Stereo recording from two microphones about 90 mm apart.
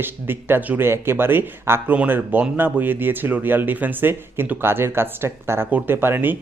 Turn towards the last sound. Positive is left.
turn(degrees=-25)  # may be behind; listen again after turning